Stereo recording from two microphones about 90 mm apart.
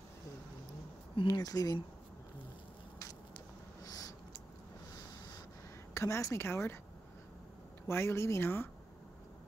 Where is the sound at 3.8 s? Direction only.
40° left (ahead or behind).